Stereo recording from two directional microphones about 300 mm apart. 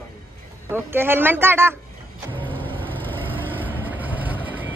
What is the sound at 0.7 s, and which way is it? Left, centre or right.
A woman's voice, centre.